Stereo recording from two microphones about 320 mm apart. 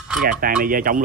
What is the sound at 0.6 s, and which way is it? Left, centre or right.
Speech, right.